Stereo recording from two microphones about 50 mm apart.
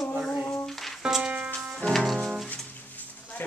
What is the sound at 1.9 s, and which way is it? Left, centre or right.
Music, centre.